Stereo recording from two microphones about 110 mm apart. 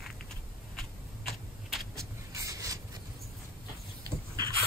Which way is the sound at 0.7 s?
Centre (ahead or behind).